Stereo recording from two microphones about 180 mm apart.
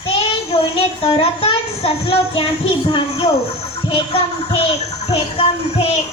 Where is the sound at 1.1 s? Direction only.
30° left (ahead or behind).